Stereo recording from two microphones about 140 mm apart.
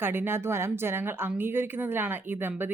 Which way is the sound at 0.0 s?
15° right (ahead or behind).